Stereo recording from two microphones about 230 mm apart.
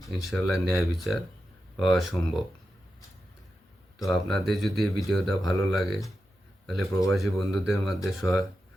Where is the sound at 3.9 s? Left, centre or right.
Centre.